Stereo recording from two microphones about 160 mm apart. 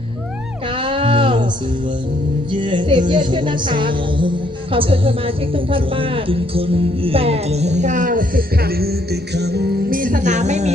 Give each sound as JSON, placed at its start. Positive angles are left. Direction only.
{"t": 0.8, "sound": "music", "side_deg": -35}
{"t": 2.5, "sound": "music", "side_deg": -30}
{"t": 3.1, "sound": "a woman's voice", "side_deg": -30}